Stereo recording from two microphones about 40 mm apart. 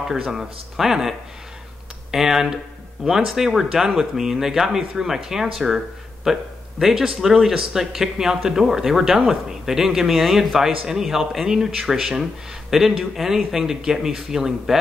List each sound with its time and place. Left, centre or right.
0.1 s speech: centre
10.6 s speech: centre